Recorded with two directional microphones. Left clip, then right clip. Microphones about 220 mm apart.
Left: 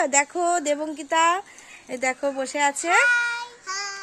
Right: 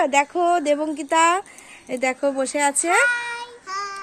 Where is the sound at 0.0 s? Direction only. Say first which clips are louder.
Right 3 dB; 5° left (ahead or behind); by 3.1 s 15° right (ahead or behind).